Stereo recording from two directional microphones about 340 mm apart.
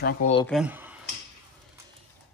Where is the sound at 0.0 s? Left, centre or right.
Left.